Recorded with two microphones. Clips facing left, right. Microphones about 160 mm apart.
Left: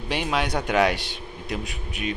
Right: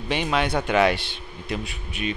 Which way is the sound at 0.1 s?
10° left (ahead or behind).